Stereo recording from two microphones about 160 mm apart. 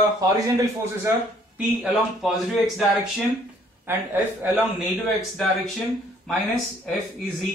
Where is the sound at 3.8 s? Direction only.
15° right (ahead or behind).